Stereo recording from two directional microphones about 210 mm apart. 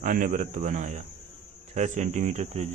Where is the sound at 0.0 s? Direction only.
40° right (ahead or behind).